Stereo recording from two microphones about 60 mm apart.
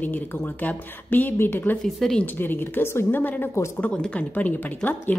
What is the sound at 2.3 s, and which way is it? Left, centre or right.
Speech, left.